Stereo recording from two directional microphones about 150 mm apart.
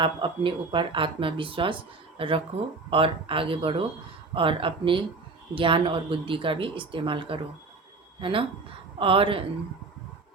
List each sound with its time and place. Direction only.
0.0 s a woman's voice: 35° right (ahead or behind)